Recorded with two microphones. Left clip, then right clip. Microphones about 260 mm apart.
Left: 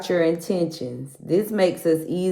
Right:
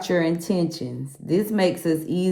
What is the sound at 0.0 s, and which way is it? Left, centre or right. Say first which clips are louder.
Speech: left 2 dB; right.